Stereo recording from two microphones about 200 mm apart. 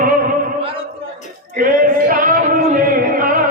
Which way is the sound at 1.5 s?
45° right (ahead or behind).